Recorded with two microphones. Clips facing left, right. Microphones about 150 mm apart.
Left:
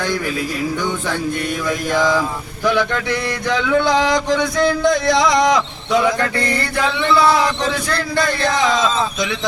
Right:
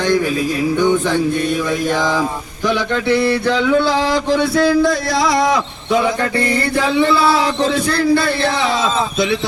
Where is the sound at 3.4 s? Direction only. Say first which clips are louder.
Right 2 dB; 15° left (ahead or behind).